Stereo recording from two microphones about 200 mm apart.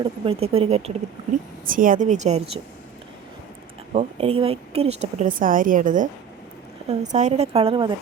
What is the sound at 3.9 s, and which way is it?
A woman's voice, 30° right (ahead or behind).